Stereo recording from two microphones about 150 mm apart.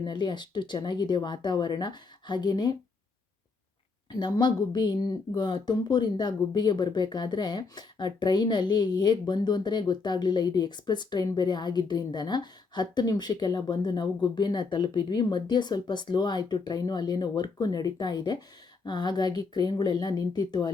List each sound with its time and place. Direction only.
0.0 s speech: 30° left (ahead or behind)
4.1 s speech: 30° left (ahead or behind)